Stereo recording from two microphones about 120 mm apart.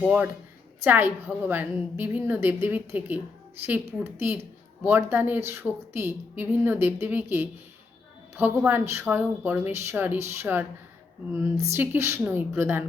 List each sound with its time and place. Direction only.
0.0 s a woman's voice: 10° right (ahead or behind)